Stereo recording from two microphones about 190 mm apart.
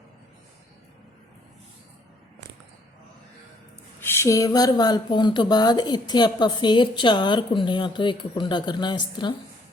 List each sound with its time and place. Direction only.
4.0 s speech: 15° left (ahead or behind)